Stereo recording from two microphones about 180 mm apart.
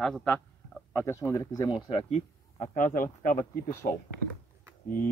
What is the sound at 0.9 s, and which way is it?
Speech, 15° left (ahead or behind).